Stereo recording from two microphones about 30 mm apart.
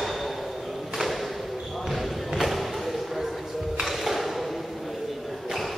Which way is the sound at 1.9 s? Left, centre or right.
Centre.